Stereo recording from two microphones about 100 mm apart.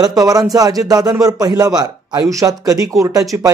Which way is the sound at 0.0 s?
40° right (ahead or behind).